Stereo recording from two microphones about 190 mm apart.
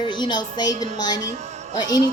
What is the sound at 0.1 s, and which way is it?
Speech, 25° left (ahead or behind).